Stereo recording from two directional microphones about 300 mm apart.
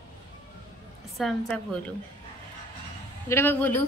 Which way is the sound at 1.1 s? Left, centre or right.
Centre.